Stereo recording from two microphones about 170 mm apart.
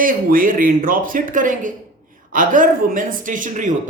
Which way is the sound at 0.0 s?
55° right (ahead or behind).